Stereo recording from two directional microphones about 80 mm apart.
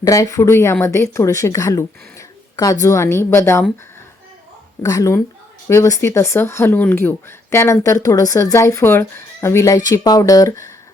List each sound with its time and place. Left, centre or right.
0.0 s speech: left
4.8 s speech: left
9.7 s speech: left